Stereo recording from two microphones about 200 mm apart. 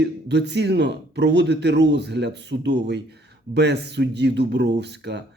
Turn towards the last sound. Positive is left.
turn(degrees=-60)  # may be behind; listen again after turning